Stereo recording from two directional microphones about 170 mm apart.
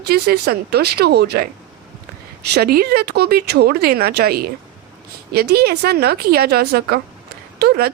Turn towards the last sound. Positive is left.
turn(degrees=-70)  # may be behind; listen again after turning